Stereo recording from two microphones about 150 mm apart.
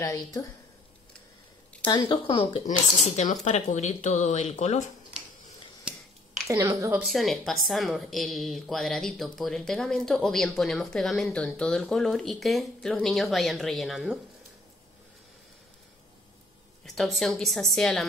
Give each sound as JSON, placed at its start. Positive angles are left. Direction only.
{"t": 0.0, "sound": "speech", "side_deg": 25}
{"t": 1.9, "sound": "speech", "side_deg": 30}
{"t": 3.4, "sound": "speech", "side_deg": 55}
{"t": 6.4, "sound": "a woman's voice", "side_deg": -20}
{"t": 7.1, "sound": "speech", "side_deg": 0}
{"t": 16.8, "sound": "speech", "side_deg": 0}